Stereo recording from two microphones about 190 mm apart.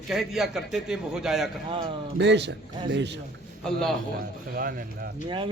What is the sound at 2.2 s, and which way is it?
Speech, 65° right (ahead or behind).